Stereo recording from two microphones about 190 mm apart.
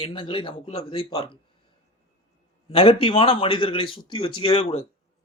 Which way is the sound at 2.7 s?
30° left (ahead or behind).